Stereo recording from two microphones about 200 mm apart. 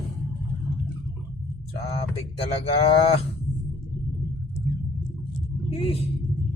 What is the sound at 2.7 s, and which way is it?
Speech, 30° left (ahead or behind).